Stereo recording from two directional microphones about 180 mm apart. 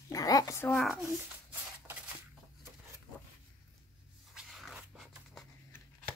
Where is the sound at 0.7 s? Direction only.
Centre (ahead or behind).